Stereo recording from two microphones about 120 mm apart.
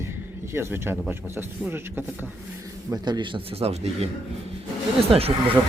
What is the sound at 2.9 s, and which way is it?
Speech, 35° right (ahead or behind).